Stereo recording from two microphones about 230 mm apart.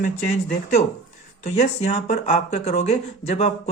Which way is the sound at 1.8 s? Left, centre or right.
Left.